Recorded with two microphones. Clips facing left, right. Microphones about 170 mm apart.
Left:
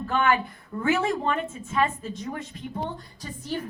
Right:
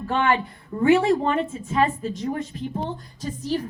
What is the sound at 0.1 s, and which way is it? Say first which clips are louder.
A woman's voice: right 2 dB; 30° right (ahead or behind).